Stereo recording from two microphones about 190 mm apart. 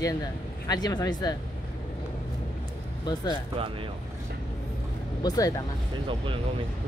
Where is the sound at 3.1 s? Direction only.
20° left (ahead or behind).